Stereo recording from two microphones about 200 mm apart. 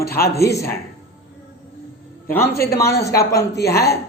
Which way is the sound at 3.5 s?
55° left (ahead or behind).